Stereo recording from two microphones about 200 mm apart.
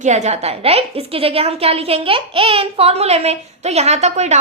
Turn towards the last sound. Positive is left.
turn(degrees=-35)  # may be behind; listen again after turning